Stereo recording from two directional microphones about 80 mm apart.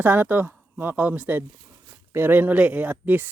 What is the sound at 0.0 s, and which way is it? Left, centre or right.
Speech, right.